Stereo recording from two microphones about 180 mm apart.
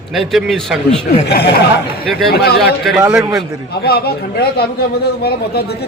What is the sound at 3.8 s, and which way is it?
Speech, 60° left (ahead or behind).